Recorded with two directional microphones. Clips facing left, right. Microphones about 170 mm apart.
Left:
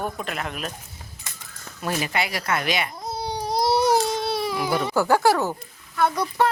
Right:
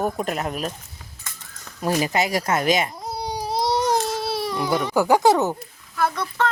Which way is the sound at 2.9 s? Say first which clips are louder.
Even; 10° right (ahead or behind).